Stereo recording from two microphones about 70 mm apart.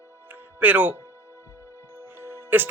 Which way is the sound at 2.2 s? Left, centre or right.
Right.